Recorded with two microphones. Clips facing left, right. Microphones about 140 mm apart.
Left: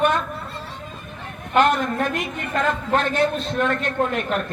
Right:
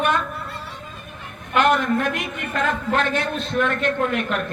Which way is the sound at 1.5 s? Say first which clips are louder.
Even; 40° left (ahead or behind).